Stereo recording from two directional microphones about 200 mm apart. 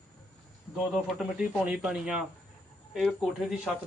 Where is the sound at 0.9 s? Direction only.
Centre (ahead or behind).